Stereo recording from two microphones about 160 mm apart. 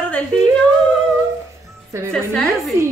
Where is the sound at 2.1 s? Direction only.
5° left (ahead or behind).